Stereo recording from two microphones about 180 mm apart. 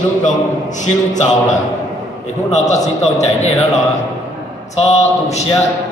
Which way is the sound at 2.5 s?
40° left (ahead or behind).